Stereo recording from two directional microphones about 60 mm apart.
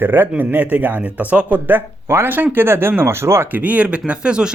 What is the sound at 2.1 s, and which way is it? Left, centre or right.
Speech, right.